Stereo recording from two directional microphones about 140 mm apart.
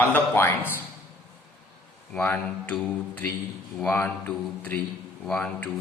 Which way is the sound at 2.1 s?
10° left (ahead or behind).